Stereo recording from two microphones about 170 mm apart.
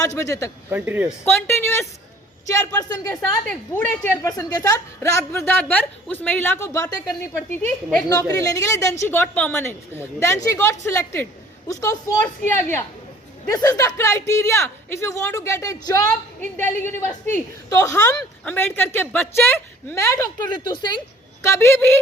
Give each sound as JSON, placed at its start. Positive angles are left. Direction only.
{"t": 0.0, "sound": "a man's voice", "side_deg": 20}
{"t": 0.7, "sound": "speech", "side_deg": -10}
{"t": 1.2, "sound": "a sound", "side_deg": 15}
{"t": 2.5, "sound": "a woman's voice", "side_deg": 20}
{"t": 8.4, "sound": "a woman's voice", "side_deg": 20}
{"t": 20.7, "sound": "a man's voice", "side_deg": 25}
{"t": 21.4, "sound": "a woman's voice", "side_deg": 15}